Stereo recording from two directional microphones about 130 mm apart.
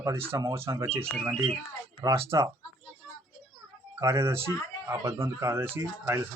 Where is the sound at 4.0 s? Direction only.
20° right (ahead or behind).